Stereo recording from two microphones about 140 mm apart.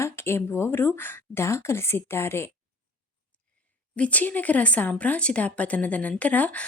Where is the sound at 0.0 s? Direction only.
20° left (ahead or behind).